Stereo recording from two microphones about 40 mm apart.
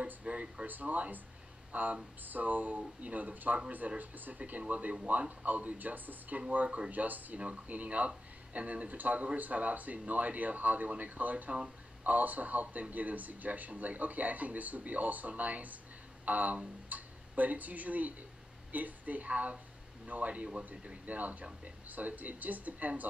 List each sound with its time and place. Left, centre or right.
0.0 s a sound: right
0.7 s speech: right
6.5 s speech: right
7.3 s speech: right
20.7 s speech: right
21.0 s speech: right